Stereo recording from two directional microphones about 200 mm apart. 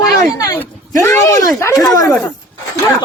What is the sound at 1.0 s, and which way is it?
Speech, 15° left (ahead or behind).